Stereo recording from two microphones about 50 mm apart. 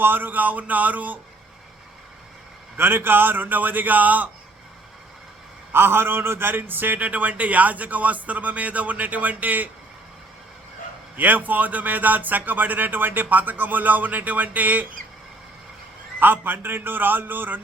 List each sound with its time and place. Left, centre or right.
0.0 s a man's voice: right
2.7 s a man's voice: right
5.7 s a man's voice: right
11.2 s a man's voice: right
16.2 s a man's voice: right